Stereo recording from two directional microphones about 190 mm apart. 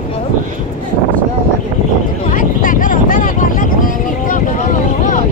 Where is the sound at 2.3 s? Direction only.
45° left (ahead or behind).